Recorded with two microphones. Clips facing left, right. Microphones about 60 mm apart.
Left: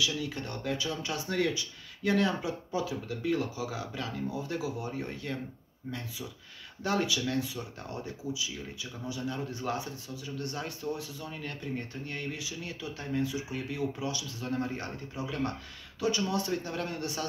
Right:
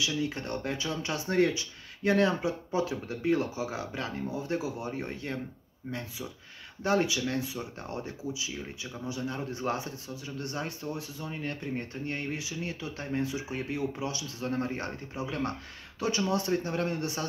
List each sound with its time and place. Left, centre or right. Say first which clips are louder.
0.0 s a man's voice: right 2 dB; right